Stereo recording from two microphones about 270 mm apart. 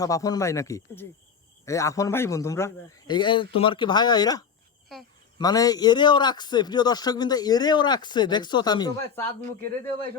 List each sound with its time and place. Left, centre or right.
0.0 s a man's voice: centre